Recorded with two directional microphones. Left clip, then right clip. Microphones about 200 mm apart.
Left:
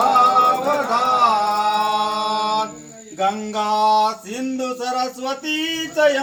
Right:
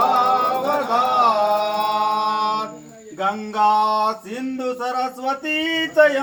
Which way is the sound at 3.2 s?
50° left (ahead or behind).